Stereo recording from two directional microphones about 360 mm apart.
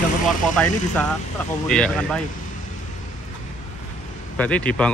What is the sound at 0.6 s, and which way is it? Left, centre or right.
A man's voice, centre.